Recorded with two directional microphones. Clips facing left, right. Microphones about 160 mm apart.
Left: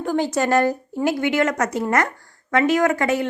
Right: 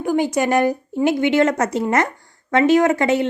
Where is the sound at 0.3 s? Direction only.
15° right (ahead or behind).